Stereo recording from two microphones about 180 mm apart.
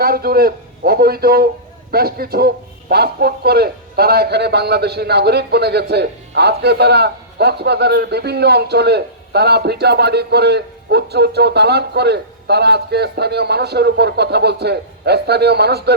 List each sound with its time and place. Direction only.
0.0 s a man's voice: 55° right (ahead or behind)